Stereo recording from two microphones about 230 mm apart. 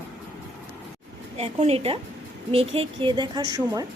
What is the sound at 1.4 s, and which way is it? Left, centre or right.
Speech, right.